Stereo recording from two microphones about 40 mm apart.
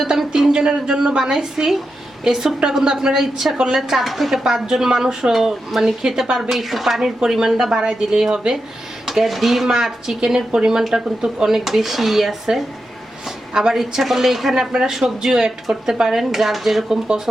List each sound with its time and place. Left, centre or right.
0.2 s a woman's voice: centre
6.5 s speech: centre
9.0 s speech: centre
14.7 s speech: centre